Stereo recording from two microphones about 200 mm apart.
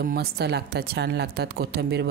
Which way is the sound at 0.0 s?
50° right (ahead or behind).